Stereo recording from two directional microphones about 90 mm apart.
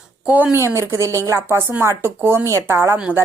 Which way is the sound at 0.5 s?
30° right (ahead or behind).